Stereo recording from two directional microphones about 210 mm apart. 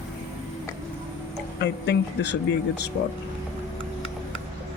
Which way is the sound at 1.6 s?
55° left (ahead or behind).